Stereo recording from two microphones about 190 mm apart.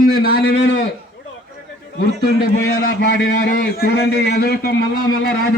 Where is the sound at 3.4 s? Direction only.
50° left (ahead or behind).